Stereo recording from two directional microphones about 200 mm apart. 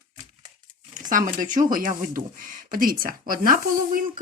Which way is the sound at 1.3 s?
40° right (ahead or behind).